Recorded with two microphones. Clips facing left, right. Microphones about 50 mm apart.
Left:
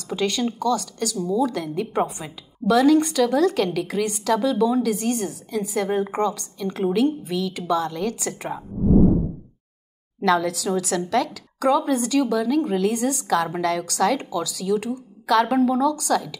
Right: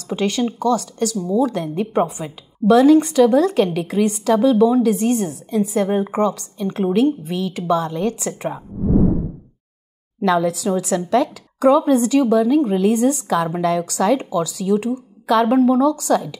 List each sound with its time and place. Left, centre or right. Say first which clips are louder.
0.1 s a woman's voice: right 3 dB; right
10.2 s a woman's voice: right 3 dB; centre